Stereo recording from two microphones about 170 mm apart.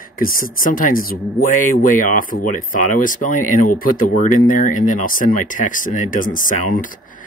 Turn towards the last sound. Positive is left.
turn(degrees=50)  # may be behind; listen again after turning